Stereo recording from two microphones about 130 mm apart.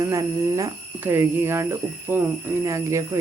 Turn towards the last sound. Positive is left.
turn(degrees=-25)  # may be behind; listen again after turning